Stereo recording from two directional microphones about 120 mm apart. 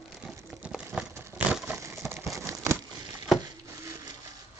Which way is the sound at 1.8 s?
20° right (ahead or behind).